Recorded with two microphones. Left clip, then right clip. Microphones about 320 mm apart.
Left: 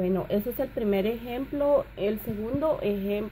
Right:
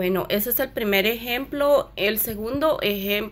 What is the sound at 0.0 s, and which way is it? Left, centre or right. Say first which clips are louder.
A woman's voice: right 4 dB; centre.